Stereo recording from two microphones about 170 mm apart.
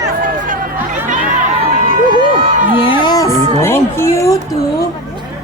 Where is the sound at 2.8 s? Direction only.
30° left (ahead or behind).